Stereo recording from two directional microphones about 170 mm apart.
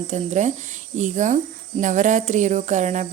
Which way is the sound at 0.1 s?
45° right (ahead or behind).